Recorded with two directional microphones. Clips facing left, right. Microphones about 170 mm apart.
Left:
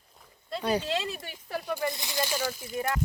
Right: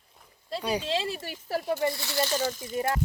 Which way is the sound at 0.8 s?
30° right (ahead or behind).